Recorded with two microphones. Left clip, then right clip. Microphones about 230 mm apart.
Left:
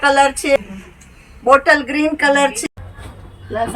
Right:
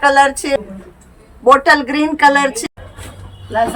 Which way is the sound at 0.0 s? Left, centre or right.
Centre.